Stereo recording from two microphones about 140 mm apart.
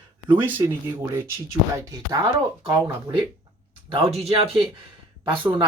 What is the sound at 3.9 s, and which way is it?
Speech, 45° right (ahead or behind).